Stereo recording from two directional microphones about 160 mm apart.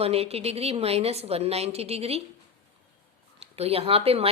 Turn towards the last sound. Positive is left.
turn(degrees=-35)  # may be behind; listen again after turning